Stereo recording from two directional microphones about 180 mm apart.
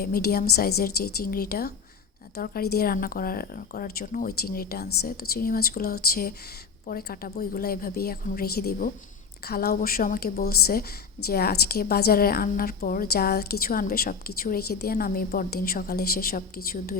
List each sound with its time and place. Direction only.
0.0 s a woman's voice: 55° left (ahead or behind)